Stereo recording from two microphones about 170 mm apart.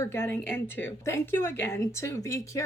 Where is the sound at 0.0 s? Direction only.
15° left (ahead or behind).